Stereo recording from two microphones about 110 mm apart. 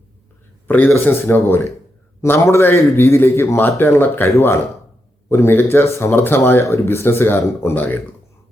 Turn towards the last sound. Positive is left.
turn(degrees=15)  # may be behind; listen again after turning